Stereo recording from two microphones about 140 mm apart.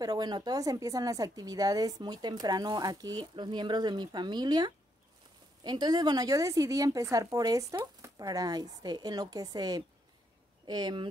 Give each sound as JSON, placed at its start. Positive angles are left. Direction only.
{"t": 0.0, "sound": "a woman's voice", "side_deg": -30}